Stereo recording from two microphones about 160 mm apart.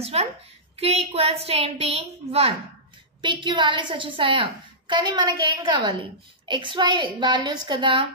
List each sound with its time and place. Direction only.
0.0 s a woman's voice: 40° right (ahead or behind)